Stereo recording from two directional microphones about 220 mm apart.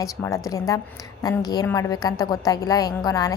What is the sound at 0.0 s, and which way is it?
A woman's voice, 15° left (ahead or behind).